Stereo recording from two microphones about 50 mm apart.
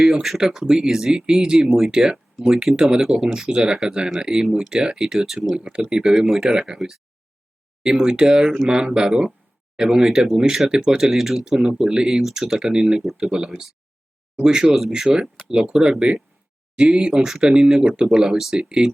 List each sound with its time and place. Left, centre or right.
0.0 s speech: centre
5.5 s speech: centre
5.9 s speech: centre
11.4 s speech: centre